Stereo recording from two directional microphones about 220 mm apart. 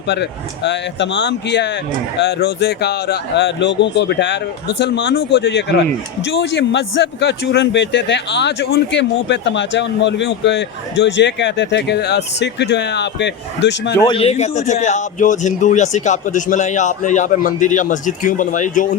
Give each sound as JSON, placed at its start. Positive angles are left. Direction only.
{"t": 0.1, "sound": "a man's voice", "side_deg": 50}
{"t": 14.1, "sound": "a man's voice", "side_deg": 25}